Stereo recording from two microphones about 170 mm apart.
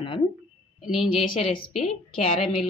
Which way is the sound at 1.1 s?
30° left (ahead or behind).